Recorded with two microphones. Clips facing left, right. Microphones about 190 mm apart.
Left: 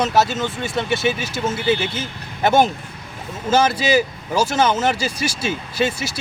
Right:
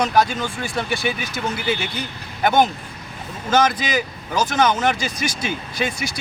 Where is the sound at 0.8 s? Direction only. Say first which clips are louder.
Left 4 dB; 25° left (ahead or behind).